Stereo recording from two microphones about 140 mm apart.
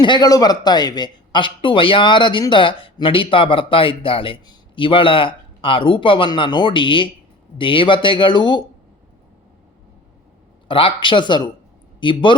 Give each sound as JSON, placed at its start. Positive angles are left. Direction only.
{"t": 0.0, "sound": "a man's voice", "side_deg": 30}
{"t": 10.7, "sound": "a man's voice", "side_deg": 40}